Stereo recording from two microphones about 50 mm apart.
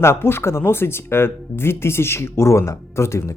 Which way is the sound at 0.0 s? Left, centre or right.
Left.